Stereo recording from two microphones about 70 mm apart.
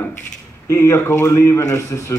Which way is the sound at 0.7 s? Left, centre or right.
Left.